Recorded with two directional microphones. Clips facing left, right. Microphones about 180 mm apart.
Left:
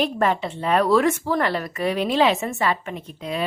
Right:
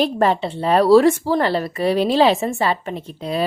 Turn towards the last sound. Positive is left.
turn(degrees=-35)  # may be behind; listen again after turning